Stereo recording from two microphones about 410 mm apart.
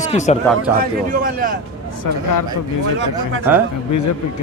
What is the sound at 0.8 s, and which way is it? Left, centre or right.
Speech, centre.